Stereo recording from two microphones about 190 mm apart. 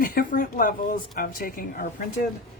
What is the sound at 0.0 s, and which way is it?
Speech, 45° left (ahead or behind).